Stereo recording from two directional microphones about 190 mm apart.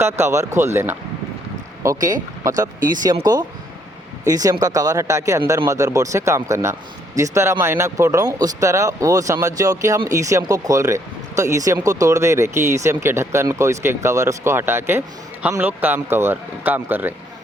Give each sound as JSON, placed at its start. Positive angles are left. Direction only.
{"t": 0.0, "sound": "speech", "side_deg": -15}
{"t": 4.3, "sound": "speech", "side_deg": -20}